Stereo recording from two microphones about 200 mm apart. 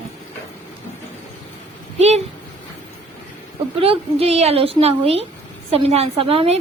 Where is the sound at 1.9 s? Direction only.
30° right (ahead or behind).